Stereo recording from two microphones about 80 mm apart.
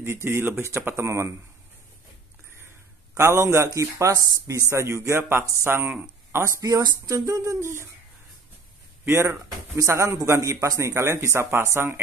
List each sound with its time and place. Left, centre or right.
0.0 s speech: right
3.2 s speech: right
6.6 s speech: right
7.2 s speech: right
9.0 s speech: right